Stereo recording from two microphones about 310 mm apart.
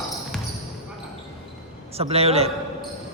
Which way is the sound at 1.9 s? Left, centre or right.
Centre.